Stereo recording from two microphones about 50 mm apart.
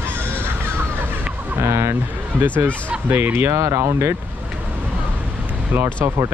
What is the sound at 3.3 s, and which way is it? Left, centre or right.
Speech, right.